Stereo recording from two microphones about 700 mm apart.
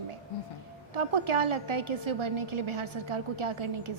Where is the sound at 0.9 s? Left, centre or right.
Right.